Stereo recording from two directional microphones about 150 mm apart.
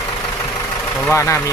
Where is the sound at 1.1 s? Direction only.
20° left (ahead or behind).